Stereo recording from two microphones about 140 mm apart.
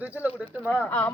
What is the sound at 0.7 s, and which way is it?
Speech, 10° left (ahead or behind).